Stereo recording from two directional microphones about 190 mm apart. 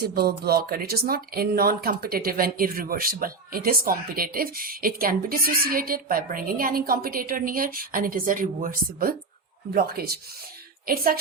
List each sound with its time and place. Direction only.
0.0 s speech: 55° right (ahead or behind)